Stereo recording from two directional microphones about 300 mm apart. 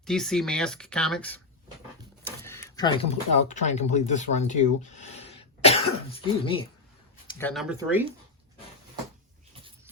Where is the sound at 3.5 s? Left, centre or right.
Left.